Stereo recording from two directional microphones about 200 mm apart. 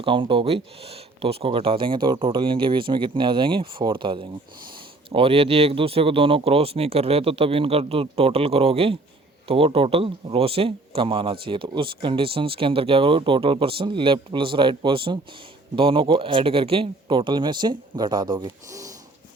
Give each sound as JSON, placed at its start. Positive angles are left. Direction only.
{"t": 0.0, "sound": "a man's voice", "side_deg": -25}